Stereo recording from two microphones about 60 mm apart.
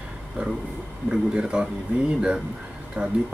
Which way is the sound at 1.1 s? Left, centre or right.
Centre.